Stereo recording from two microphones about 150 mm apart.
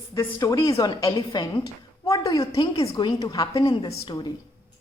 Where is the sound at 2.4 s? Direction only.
35° left (ahead or behind).